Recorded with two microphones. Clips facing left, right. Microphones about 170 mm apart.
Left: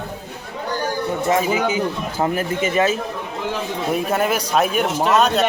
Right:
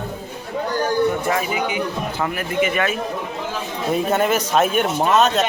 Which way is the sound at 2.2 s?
30° left (ahead or behind).